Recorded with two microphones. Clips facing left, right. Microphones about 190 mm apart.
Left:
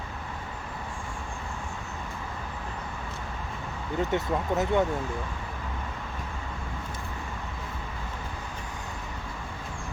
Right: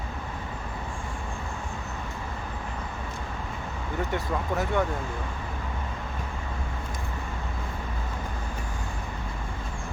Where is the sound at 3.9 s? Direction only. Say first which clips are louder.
Left 3 dB; 20° left (ahead or behind).